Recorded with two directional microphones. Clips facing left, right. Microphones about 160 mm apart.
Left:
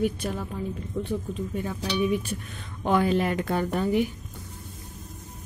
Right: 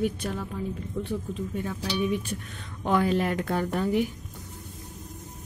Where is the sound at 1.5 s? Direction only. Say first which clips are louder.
Left 2 dB; 15° left (ahead or behind).